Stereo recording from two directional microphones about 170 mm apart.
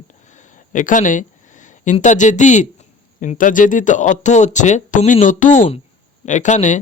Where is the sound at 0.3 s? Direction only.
50° left (ahead or behind).